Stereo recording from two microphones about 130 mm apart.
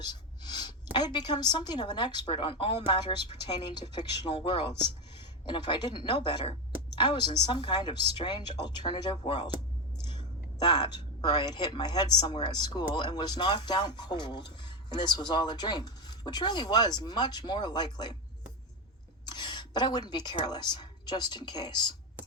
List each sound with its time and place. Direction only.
0.0 s a woman's voice: 35° left (ahead or behind)
19.2 s a woman's voice: 35° left (ahead or behind)